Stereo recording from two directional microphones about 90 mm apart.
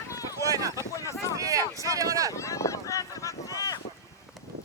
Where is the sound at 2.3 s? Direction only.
35° left (ahead or behind).